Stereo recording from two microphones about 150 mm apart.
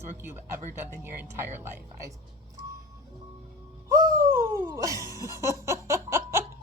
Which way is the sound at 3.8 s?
20° right (ahead or behind).